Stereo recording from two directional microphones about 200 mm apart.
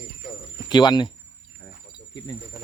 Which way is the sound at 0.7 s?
20° left (ahead or behind).